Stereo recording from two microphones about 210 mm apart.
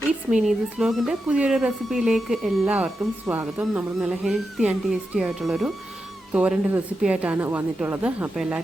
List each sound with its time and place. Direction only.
0.3 s a woman's voice: 5° right (ahead or behind)